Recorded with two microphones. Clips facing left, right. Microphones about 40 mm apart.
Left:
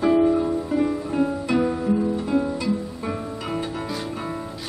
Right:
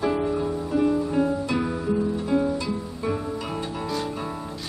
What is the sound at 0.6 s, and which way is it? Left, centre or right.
Music, centre.